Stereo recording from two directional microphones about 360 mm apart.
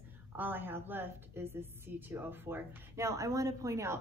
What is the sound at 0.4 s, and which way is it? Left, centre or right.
A woman's voice, centre.